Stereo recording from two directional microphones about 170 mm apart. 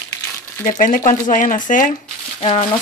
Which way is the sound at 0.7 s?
50° left (ahead or behind).